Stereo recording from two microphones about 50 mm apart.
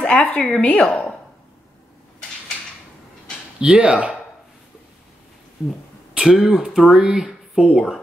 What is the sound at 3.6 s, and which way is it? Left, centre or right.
Speech, right.